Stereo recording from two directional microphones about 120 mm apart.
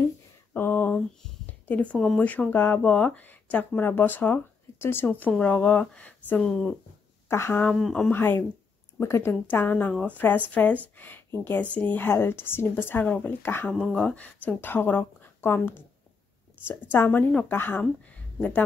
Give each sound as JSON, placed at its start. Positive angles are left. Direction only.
{"t": 0.5, "sound": "a sound", "side_deg": 15}
{"t": 2.1, "sound": "speech", "side_deg": 10}
{"t": 7.2, "sound": "speech", "side_deg": 20}
{"t": 7.8, "sound": "speech", "side_deg": 5}
{"t": 8.1, "sound": "speech", "side_deg": 20}
{"t": 13.7, "sound": "speech", "side_deg": 5}